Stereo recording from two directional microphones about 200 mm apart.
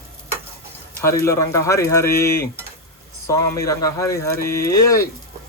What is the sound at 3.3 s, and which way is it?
Speech, 15° left (ahead or behind).